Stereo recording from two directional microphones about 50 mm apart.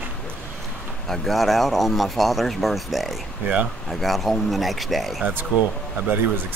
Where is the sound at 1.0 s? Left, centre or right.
Centre.